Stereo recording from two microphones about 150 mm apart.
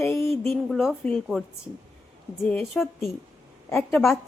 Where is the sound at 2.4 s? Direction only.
Centre (ahead or behind).